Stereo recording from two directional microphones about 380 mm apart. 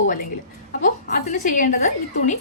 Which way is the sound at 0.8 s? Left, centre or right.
Centre.